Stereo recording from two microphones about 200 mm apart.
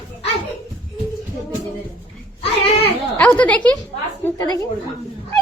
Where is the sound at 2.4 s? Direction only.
30° left (ahead or behind).